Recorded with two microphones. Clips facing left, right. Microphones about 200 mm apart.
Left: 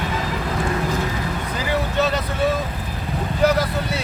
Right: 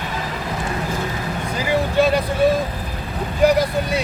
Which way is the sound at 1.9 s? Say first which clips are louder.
Right 6 dB; 10° right (ahead or behind).